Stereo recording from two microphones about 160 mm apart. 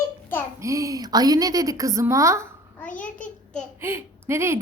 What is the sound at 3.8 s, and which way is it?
Speech, 15° right (ahead or behind).